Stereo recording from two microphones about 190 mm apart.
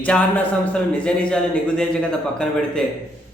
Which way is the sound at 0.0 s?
5° left (ahead or behind).